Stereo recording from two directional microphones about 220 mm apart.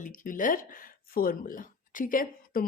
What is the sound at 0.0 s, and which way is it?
Speech, 35° left (ahead or behind).